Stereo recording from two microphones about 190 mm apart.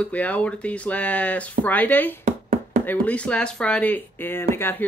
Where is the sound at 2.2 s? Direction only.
40° right (ahead or behind).